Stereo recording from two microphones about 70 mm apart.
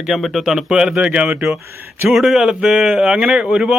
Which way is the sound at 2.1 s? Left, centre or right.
Centre.